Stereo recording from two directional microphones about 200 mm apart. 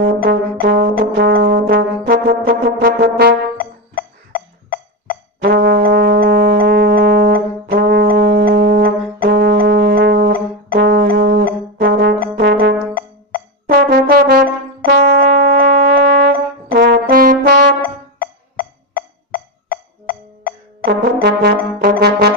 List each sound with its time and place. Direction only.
0.0 s brass instrument: 50° right (ahead or behind)
3.9 s music: 45° left (ahead or behind)
5.4 s brass instrument: 50° right (ahead or behind)
16.8 s brass instrument: 45° right (ahead or behind)
18.2 s music: 45° left (ahead or behind)
20.8 s brass instrument: 50° right (ahead or behind)